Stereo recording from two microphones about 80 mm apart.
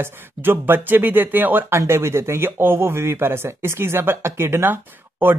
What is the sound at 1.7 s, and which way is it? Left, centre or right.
Speech, right.